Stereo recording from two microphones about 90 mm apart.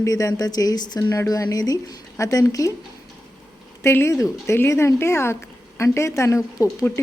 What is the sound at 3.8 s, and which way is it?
A woman's voice, 30° left (ahead or behind).